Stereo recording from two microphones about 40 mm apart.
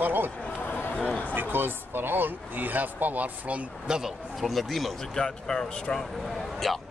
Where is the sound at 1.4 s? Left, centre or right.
Right.